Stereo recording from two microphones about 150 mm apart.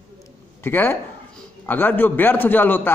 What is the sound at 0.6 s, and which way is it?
A man's voice, 15° left (ahead or behind).